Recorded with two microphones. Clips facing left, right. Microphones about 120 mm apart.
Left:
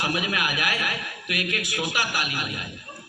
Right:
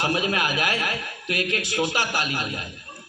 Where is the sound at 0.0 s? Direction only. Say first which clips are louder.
Right 3 dB; 30° right (ahead or behind).